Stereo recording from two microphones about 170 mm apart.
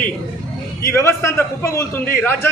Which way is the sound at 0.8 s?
15° left (ahead or behind).